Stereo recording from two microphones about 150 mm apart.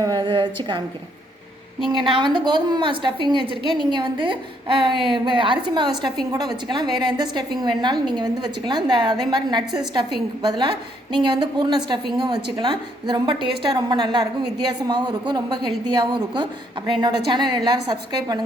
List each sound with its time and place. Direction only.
0.0 s a woman's voice: 25° right (ahead or behind)
1.9 s a woman's voice: 35° right (ahead or behind)